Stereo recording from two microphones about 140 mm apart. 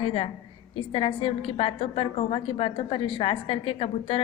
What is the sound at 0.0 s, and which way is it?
A woman's voice, 45° left (ahead or behind).